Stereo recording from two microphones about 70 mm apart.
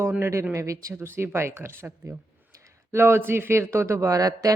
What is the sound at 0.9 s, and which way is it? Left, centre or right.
Speech, right.